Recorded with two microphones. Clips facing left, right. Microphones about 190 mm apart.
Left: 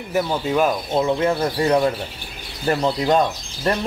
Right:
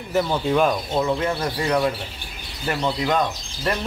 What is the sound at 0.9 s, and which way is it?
Speech, 25° left (ahead or behind).